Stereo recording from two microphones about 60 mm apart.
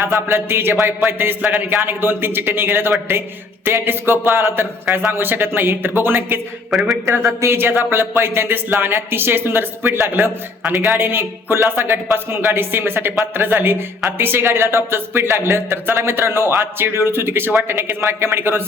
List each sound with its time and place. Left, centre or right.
0.0 s speech: right
6.7 s speech: centre
7.4 s speech: right